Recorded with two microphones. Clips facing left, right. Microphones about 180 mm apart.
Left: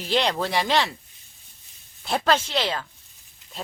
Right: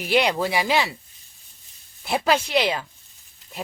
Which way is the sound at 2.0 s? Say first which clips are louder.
Right 1 dB; 10° right (ahead or behind).